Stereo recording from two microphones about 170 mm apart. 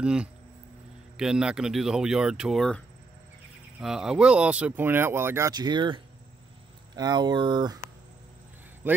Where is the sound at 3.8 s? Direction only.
5° right (ahead or behind); by 7.9 s 25° right (ahead or behind).